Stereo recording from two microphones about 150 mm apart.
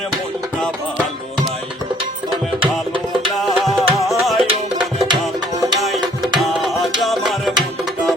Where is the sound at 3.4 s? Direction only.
Centre (ahead or behind).